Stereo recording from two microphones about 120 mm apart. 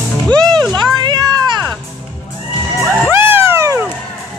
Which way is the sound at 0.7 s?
40° right (ahead or behind).